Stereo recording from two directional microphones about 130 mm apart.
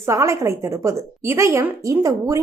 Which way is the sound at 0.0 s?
20° right (ahead or behind).